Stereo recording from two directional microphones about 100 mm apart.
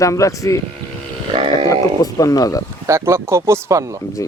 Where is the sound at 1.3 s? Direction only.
65° right (ahead or behind).